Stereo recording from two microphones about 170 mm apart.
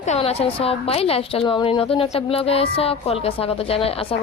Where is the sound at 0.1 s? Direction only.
35° left (ahead or behind).